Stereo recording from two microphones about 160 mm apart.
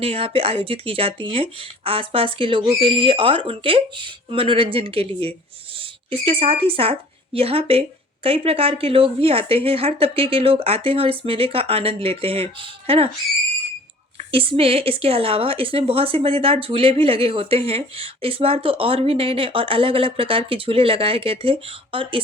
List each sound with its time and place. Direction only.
0.0 s a woman's voice: 35° right (ahead or behind)
14.2 s a woman's voice: 35° right (ahead or behind)